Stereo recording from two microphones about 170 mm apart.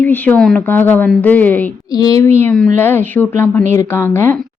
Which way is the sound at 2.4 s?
5° left (ahead or behind).